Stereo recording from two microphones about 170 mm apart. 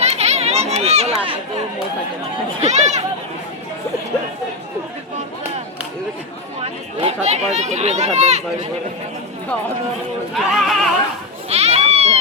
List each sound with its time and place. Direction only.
0.0 s a sound: 40° right (ahead or behind)
2.6 s speech: 40° right (ahead or behind)
6.6 s speech: 40° right (ahead or behind)
10.3 s speech: centre (ahead or behind)
11.4 s goat: 40° right (ahead or behind)